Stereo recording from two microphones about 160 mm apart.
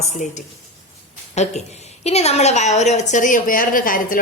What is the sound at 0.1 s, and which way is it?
A woman's voice, 50° left (ahead or behind).